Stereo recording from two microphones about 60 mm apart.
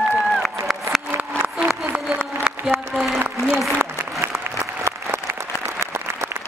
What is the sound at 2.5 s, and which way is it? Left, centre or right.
Applause, centre.